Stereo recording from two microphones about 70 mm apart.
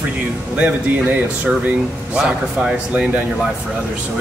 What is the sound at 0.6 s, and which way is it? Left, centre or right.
Speech, right.